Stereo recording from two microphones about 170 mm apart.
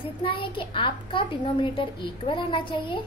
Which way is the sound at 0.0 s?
30° left (ahead or behind).